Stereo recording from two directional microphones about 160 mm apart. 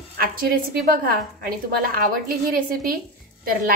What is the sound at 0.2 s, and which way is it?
A woman's voice, 65° right (ahead or behind).